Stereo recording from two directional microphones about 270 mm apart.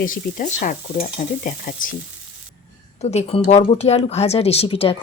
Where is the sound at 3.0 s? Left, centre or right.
Left.